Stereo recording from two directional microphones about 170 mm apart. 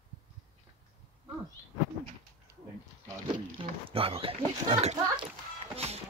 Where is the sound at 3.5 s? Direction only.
35° right (ahead or behind).